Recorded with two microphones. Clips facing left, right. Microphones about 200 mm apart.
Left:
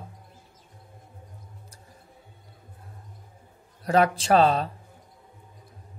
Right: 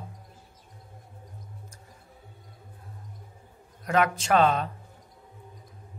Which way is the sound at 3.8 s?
35° left (ahead or behind).